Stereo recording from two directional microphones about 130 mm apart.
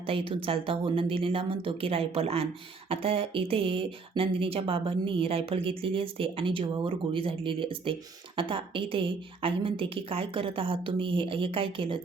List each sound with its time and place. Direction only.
0.0 s speech: 45° right (ahead or behind)